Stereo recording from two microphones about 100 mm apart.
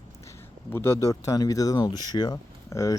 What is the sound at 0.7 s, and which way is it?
Speech, 25° left (ahead or behind).